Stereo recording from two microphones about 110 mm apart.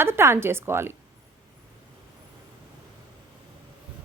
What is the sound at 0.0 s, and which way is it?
Speech, 20° right (ahead or behind).